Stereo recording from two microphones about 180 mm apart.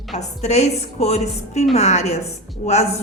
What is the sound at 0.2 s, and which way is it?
Speech, 40° left (ahead or behind).